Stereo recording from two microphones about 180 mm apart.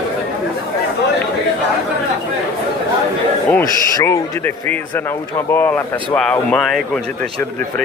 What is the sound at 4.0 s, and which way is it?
Speech, 10° left (ahead or behind).